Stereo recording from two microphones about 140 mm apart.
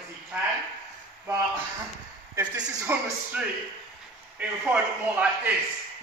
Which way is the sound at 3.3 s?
10° right (ahead or behind).